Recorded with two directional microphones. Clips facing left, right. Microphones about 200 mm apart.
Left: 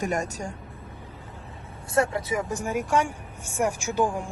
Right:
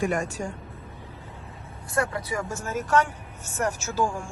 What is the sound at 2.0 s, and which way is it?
Speech, 25° left (ahead or behind).